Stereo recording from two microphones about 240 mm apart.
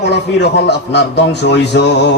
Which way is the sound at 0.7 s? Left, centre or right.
Left.